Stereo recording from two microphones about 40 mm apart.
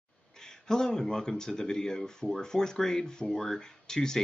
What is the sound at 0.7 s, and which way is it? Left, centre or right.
Speech, centre.